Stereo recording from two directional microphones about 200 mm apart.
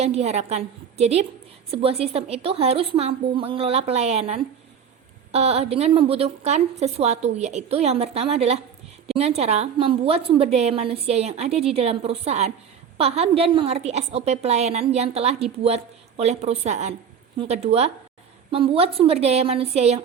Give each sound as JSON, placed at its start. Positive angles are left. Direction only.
{"t": 0.0, "sound": "a woman's voice", "side_deg": -30}